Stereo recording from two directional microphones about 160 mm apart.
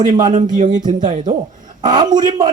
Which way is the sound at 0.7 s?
25° right (ahead or behind).